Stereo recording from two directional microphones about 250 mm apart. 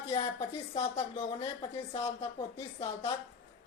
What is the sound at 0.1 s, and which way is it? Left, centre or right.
A woman's voice, left.